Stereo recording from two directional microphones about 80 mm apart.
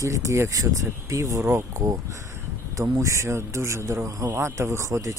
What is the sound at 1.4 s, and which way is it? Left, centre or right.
Speech, right.